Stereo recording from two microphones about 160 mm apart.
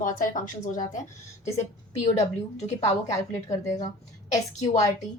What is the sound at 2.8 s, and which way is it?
A woman's voice, 20° left (ahead or behind).